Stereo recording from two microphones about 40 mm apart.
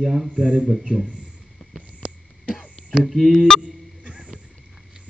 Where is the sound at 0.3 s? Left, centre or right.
Right.